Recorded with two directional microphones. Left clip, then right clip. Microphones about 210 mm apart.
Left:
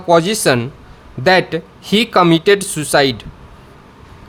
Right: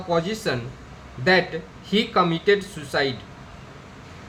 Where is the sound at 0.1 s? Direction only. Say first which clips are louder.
Left 12 dB; 60° left (ahead or behind).